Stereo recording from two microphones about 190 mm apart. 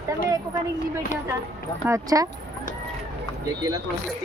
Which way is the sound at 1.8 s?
15° right (ahead or behind).